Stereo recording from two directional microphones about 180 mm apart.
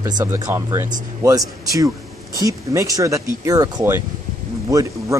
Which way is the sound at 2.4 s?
20° right (ahead or behind).